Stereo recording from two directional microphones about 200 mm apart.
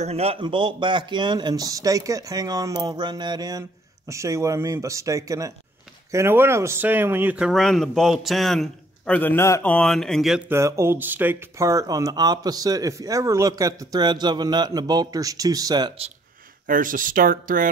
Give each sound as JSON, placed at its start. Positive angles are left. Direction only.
{"t": 0.0, "sound": "speech", "side_deg": -30}
{"t": 10.5, "sound": "speech", "side_deg": -10}
{"t": 16.6, "sound": "speech", "side_deg": -45}